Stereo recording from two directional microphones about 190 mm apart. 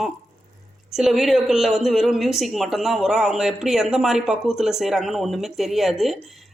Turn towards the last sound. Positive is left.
turn(degrees=0)  # may be behind; listen again after turning